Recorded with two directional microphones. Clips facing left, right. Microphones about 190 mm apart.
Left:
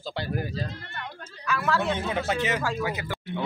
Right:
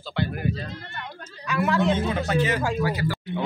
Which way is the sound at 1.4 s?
20° right (ahead or behind).